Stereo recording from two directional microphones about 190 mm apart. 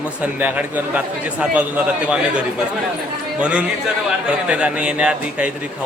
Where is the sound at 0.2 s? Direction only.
10° right (ahead or behind).